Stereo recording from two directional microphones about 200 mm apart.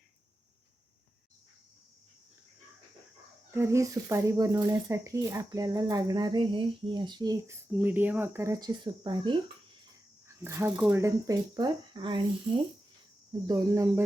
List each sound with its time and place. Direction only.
3.5 s speech: 15° right (ahead or behind)
7.7 s speech: 10° right (ahead or behind)
13.5 s speech: 15° right (ahead or behind)